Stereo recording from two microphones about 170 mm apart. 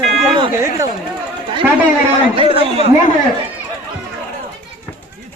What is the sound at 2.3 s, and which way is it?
Speech, 35° right (ahead or behind).